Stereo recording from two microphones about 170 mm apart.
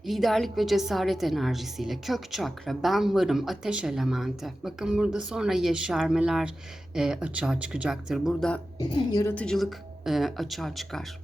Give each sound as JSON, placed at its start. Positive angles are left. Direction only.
{"t": 0.0, "sound": "a woman's voice", "side_deg": 0}
{"t": 8.8, "sound": "a woman's voice", "side_deg": 20}
{"t": 9.3, "sound": "a woman's voice", "side_deg": 5}